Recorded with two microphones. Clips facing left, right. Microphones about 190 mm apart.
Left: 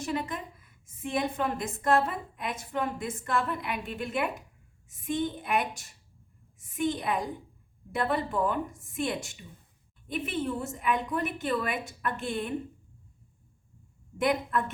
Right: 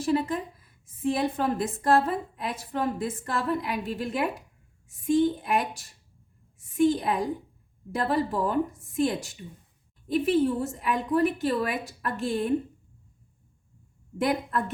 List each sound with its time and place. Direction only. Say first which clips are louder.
0.0 s a woman's voice: right 7 dB; 35° right (ahead or behind)
10.1 s a woman's voice: right 8 dB; 35° right (ahead or behind)
14.2 s a woman's voice: right 1 dB; 35° right (ahead or behind)